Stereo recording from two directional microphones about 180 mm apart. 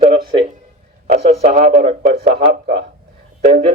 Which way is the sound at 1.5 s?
60° right (ahead or behind).